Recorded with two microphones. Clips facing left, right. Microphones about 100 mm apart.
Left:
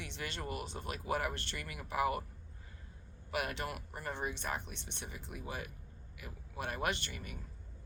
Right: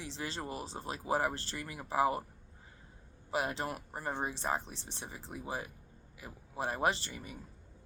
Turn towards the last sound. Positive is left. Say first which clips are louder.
# right 5 dB
turn(degrees=-25)  # may be behind; listen again after turning